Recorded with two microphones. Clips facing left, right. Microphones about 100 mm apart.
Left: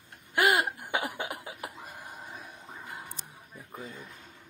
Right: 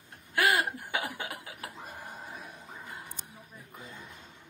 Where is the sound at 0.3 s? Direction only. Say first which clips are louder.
Left 2 dB; 20° left (ahead or behind).